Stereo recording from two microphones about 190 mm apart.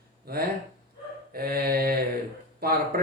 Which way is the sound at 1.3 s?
50° right (ahead or behind).